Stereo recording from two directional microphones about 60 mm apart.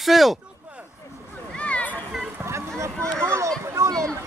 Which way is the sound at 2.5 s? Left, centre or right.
Right.